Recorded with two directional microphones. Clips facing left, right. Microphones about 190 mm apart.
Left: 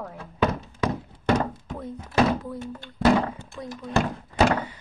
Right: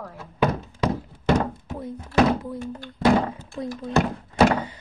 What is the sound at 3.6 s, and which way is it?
Speech, 25° right (ahead or behind).